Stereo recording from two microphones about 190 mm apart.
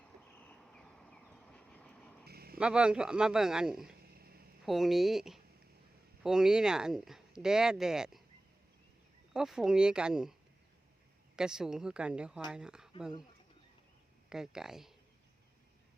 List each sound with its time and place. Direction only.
0.3 s vehicle: 10° left (ahead or behind)
2.2 s vehicle: 55° right (ahead or behind)
2.6 s speech: 5° right (ahead or behind)
4.0 s a sound: 55° right (ahead or behind)
4.6 s speech: centre (ahead or behind)
9.3 s speech: 5° right (ahead or behind)
11.3 s speech: 5° right (ahead or behind)
14.3 s speech: 5° right (ahead or behind)